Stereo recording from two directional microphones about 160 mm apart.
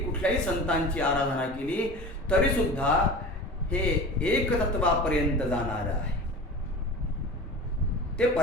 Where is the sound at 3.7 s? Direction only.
5° left (ahead or behind).